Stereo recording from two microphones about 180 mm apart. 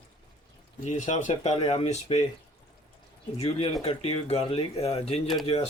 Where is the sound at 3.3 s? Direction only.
35° left (ahead or behind).